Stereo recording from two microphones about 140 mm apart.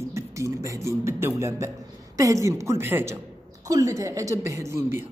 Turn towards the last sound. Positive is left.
turn(degrees=-20)  # may be behind; listen again after turning